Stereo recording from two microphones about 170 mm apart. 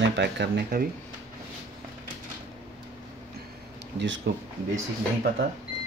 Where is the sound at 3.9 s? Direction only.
90° right.